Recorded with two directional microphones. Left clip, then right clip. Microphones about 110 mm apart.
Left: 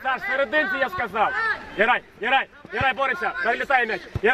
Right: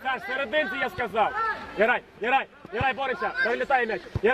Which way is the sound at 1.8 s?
30° left (ahead or behind).